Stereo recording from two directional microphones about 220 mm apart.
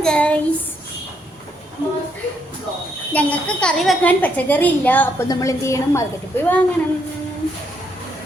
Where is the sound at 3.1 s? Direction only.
5° left (ahead or behind).